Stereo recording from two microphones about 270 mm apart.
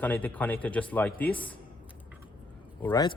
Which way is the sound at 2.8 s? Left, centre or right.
Centre.